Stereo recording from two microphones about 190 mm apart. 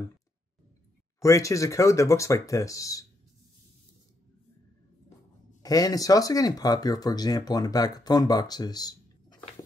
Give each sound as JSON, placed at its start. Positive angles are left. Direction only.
{"t": 1.2, "sound": "speech", "side_deg": 15}
{"t": 5.6, "sound": "speech", "side_deg": 20}